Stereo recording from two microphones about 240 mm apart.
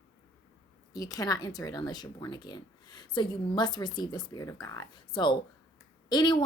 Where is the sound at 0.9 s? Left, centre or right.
Centre.